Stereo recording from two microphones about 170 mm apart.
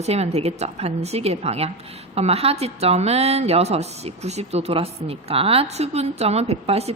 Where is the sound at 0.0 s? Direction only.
40° right (ahead or behind).